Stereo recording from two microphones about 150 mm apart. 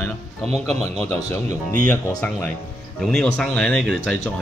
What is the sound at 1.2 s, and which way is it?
Speech, 55° right (ahead or behind).